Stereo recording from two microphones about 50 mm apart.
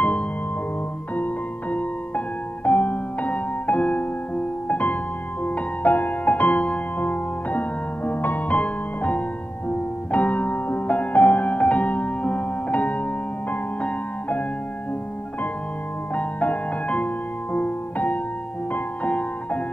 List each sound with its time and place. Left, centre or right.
1.1 s music: left
16.2 s music: left